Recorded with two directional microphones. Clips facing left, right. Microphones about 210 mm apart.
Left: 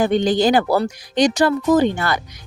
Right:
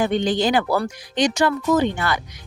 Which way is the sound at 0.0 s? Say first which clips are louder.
Left 4 dB; 40° left (ahead or behind).